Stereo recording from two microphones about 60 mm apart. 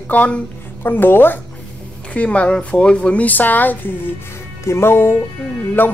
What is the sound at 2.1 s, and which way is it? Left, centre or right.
A woman's voice, left.